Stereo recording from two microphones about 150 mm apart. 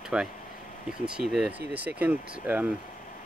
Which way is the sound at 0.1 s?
5° right (ahead or behind).